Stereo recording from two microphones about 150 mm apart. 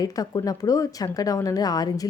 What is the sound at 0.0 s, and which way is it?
A woman's voice, 25° left (ahead or behind).